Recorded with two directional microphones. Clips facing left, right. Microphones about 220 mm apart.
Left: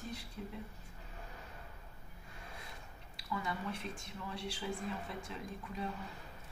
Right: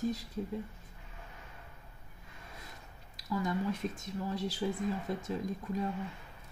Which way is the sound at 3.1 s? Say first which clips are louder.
Right 7 dB; 40° right (ahead or behind).